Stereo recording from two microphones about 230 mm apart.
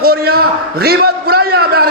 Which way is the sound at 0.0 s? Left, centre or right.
Right.